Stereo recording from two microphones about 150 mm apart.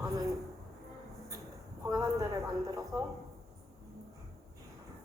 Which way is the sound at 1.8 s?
20° right (ahead or behind).